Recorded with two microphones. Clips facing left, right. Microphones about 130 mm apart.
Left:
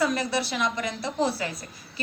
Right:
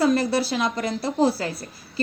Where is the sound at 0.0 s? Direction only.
30° right (ahead or behind).